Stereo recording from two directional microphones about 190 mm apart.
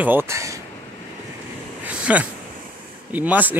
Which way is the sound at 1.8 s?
5° right (ahead or behind).